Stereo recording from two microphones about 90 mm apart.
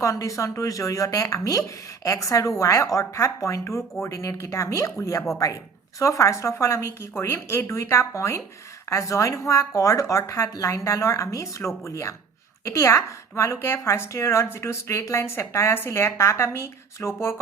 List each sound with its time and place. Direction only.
0.0 s speech: 40° left (ahead or behind)